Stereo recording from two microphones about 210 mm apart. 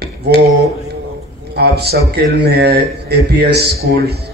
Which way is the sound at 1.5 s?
50° right (ahead or behind).